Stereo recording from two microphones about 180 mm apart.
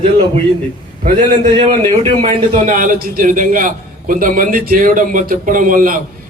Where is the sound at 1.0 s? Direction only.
40° right (ahead or behind).